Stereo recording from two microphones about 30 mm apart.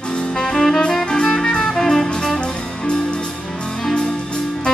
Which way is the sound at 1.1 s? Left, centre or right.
Centre.